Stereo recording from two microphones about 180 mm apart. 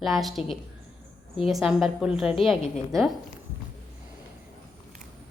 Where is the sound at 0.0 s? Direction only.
Centre (ahead or behind).